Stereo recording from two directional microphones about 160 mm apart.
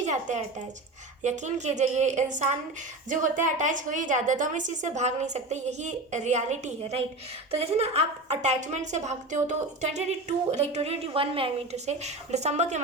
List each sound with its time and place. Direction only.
0.0 s a woman's voice: 50° right (ahead or behind)